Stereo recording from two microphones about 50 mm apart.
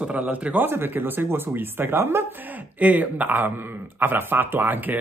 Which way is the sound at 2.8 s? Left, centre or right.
Right.